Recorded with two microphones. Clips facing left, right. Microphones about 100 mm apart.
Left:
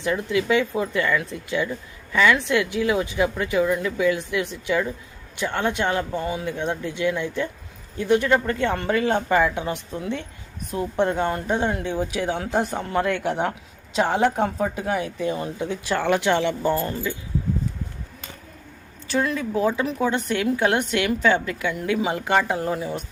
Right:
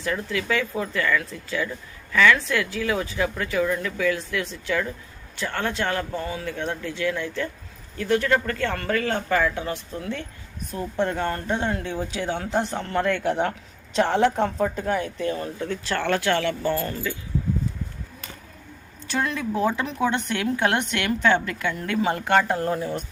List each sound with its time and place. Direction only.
0.0 s speech: 20° left (ahead or behind)
19.0 s a woman's voice: centre (ahead or behind)